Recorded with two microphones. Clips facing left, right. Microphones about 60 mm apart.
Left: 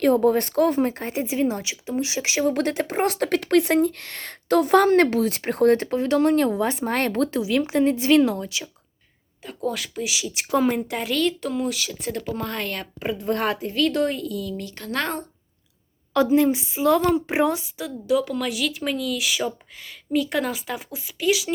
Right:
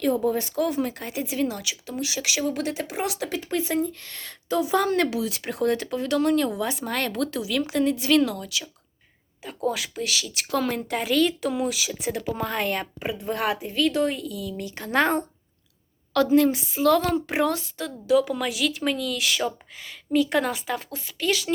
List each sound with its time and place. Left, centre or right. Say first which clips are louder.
0.0 s speech: left 5 dB; left
9.4 s speech: right 1 dB; centre
10.0 s a woman's voice: left 1 dB; centre
10.8 s speech: right 1 dB; centre
16.1 s a woman's voice: left 1 dB; centre